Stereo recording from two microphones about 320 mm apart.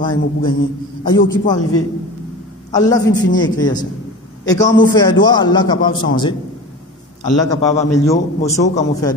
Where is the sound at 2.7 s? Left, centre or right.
Centre.